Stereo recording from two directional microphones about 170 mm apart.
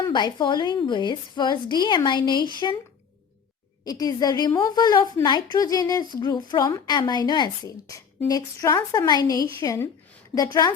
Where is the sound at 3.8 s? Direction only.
20° left (ahead or behind).